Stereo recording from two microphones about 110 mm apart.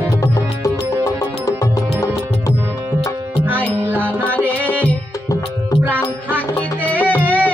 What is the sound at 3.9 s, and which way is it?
Music, 15° right (ahead or behind).